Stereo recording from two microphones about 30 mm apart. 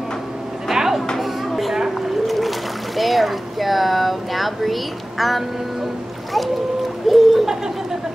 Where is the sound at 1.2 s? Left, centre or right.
Centre.